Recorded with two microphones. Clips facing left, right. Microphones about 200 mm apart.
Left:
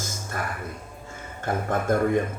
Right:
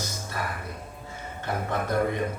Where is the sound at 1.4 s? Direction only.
50° left (ahead or behind).